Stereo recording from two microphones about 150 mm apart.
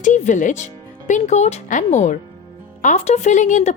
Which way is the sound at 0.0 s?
55° left (ahead or behind).